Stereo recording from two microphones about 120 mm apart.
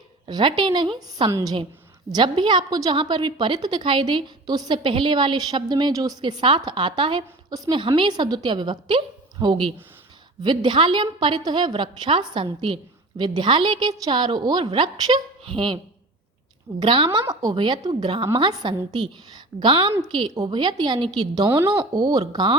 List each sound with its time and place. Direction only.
0.3 s a woman's voice: 40° right (ahead or behind)
16.8 s a woman's voice: 45° right (ahead or behind)